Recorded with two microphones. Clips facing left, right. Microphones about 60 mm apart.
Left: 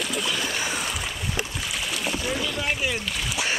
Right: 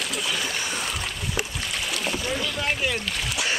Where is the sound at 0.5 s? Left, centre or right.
Centre.